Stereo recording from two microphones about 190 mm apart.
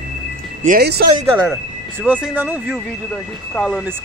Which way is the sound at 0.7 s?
55° right (ahead or behind).